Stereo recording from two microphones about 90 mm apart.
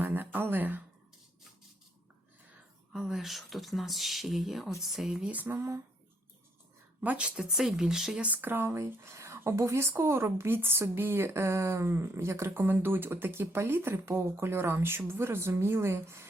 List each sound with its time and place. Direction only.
0.0 s a sound: 20° right (ahead or behind)
2.9 s speech: 5° right (ahead or behind)
5.2 s a woman's voice: 20° right (ahead or behind)
7.0 s speech: 15° right (ahead or behind)
8.3 s a woman's voice: 20° right (ahead or behind)